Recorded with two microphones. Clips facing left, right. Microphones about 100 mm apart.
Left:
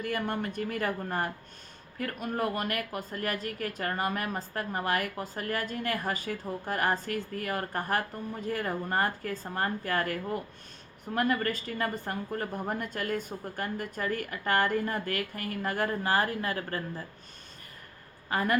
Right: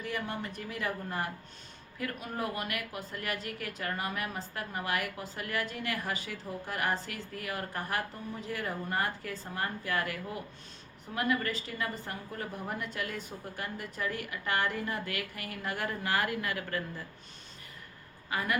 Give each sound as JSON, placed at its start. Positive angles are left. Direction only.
{"t": 0.0, "sound": "speech", "side_deg": 55}
{"t": 18.3, "sound": "a woman's voice", "side_deg": 45}